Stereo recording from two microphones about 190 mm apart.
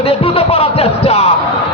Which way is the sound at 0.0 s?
30° left (ahead or behind).